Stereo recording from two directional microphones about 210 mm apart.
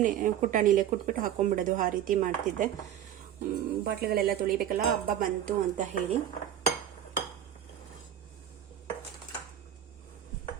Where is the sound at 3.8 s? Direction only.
45° right (ahead or behind).